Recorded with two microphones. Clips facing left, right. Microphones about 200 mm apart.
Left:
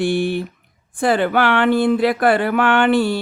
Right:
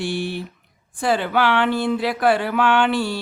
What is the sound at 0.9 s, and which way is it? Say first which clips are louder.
Speech: left 4 dB; 55° left (ahead or behind).